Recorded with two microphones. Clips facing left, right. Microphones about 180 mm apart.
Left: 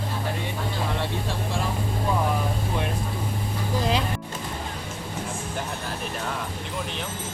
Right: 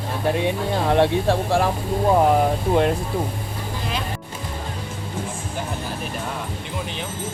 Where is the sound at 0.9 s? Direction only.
65° right (ahead or behind).